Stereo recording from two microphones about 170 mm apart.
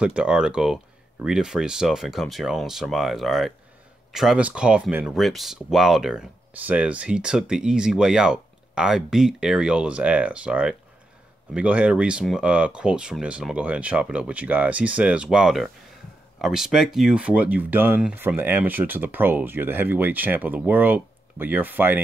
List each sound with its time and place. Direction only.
0.0 s speech: 5° right (ahead or behind)